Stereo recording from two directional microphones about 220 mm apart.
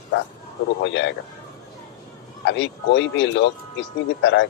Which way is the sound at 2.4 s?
55° left (ahead or behind).